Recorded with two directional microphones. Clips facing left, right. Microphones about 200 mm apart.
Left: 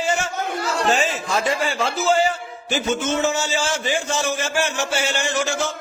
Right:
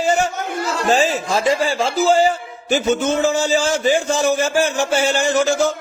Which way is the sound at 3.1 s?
35° right (ahead or behind).